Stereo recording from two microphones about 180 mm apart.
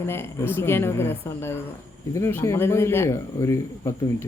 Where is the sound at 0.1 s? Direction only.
15° left (ahead or behind).